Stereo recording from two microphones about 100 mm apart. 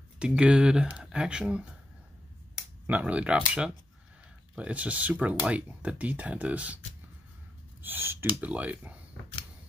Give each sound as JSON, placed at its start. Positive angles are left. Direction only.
{"t": 0.2, "sound": "speech", "side_deg": -10}
{"t": 2.9, "sound": "speech", "side_deg": -15}
{"t": 7.8, "sound": "speech", "side_deg": -20}